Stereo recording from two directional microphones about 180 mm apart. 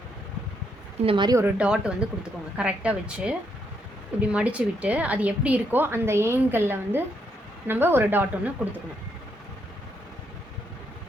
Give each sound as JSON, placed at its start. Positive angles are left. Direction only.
{"t": 1.0, "sound": "speech", "side_deg": -25}
{"t": 1.5, "sound": "a woman's voice", "side_deg": -5}